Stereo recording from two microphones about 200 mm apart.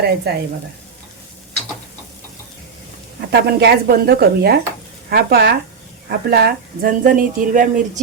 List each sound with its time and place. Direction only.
0.3 s speech: 55° right (ahead or behind)
3.2 s speech: 55° right (ahead or behind)